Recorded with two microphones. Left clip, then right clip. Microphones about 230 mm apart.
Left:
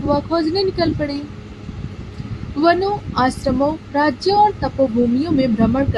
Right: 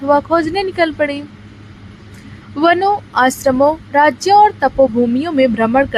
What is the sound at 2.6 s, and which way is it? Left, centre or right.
A woman's voice, right.